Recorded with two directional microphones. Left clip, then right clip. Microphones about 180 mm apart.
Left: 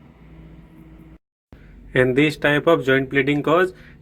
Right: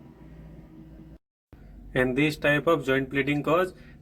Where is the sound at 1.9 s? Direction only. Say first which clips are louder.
Left 7 dB; 20° left (ahead or behind).